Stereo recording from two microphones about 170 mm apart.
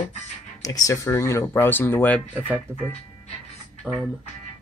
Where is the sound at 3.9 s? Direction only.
5° right (ahead or behind).